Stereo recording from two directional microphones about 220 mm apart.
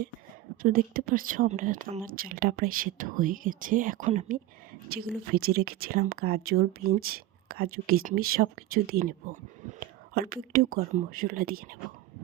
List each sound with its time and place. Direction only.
0.6 s a woman's voice: 40° right (ahead or behind)